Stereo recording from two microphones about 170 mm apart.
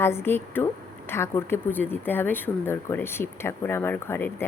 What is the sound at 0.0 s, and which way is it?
A woman's voice, 15° left (ahead or behind).